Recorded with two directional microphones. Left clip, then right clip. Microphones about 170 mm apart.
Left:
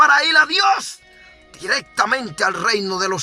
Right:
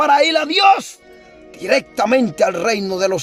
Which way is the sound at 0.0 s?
20° right (ahead or behind).